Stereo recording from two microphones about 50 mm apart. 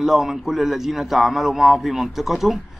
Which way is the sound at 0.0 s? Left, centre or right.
Centre.